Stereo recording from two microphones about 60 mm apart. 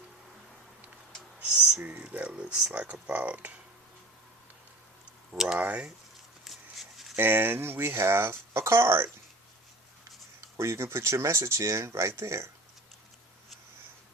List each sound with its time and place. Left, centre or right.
1.5 s speech: right
5.5 s speech: right
6.4 s a sound: centre
7.2 s speech: right
10.6 s speech: right